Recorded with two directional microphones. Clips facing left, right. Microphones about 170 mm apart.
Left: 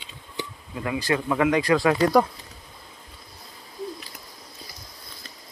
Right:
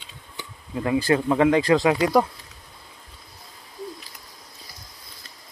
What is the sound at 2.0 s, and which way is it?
Speech, 5° right (ahead or behind).